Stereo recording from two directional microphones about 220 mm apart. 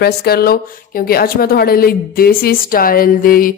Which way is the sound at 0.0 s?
45° left (ahead or behind).